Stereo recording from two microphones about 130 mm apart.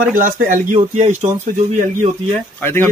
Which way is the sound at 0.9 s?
60° right (ahead or behind).